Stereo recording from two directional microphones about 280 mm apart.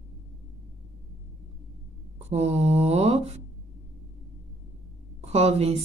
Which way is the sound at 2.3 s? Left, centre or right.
Right.